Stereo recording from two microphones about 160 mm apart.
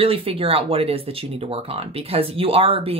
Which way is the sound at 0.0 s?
35° right (ahead or behind).